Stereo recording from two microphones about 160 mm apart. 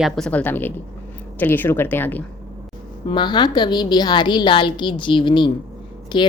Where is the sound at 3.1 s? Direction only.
30° left (ahead or behind).